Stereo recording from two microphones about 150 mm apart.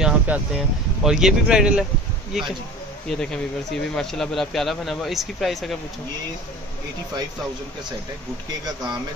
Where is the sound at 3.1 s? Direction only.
5° left (ahead or behind).